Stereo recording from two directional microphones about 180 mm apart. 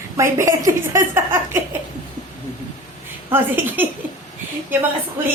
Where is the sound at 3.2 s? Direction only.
10° right (ahead or behind).